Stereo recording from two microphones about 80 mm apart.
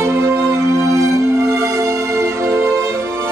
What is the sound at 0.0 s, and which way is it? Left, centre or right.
Music, right.